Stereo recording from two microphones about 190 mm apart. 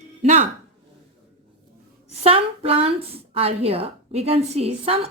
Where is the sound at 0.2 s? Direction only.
40° right (ahead or behind).